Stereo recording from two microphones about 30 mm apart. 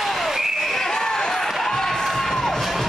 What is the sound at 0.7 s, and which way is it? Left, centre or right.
Basketball bounce, centre.